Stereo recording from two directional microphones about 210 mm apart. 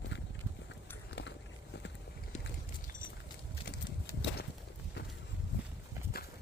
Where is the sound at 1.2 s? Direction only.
60° left (ahead or behind).